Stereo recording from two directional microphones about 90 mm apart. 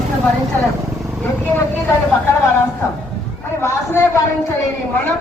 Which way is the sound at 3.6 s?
25° left (ahead or behind).